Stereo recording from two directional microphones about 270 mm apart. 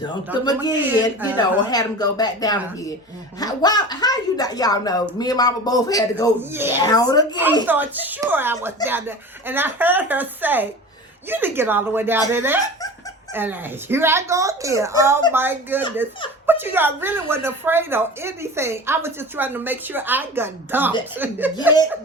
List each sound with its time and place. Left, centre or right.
0.4 s a woman's voice: centre
6.5 s a woman's voice: centre
6.8 s a woman's voice: centre
7.7 s a woman's voice: centre